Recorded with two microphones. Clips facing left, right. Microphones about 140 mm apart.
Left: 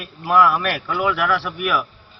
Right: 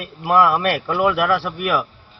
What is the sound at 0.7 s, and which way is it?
Speech, 30° right (ahead or behind).